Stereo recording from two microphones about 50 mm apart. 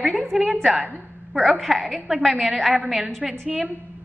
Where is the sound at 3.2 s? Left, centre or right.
Centre.